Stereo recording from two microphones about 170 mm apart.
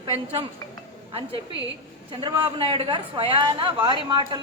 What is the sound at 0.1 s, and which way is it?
Speech, 35° right (ahead or behind).